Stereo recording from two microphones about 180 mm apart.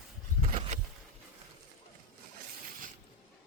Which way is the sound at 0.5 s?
30° right (ahead or behind).